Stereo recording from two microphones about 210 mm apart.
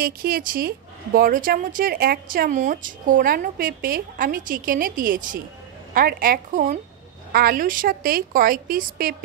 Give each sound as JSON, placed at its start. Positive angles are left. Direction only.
{"t": 0.0, "sound": "a woman's voice", "side_deg": -45}